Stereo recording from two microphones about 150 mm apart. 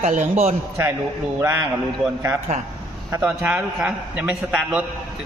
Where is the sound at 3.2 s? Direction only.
10° right (ahead or behind).